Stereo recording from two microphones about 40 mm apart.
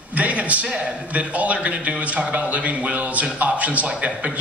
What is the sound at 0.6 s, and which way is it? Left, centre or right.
A man's voice, right.